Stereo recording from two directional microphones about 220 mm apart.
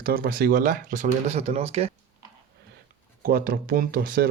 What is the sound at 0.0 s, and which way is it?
Speech, 40° right (ahead or behind).